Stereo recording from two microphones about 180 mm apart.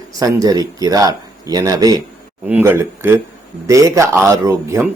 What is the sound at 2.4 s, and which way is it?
A man's voice, 10° right (ahead or behind).